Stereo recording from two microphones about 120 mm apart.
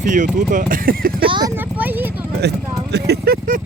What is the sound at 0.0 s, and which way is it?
Speech, 90° right.